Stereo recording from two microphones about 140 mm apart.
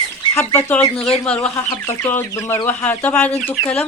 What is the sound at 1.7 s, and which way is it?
Speech, 25° left (ahead or behind).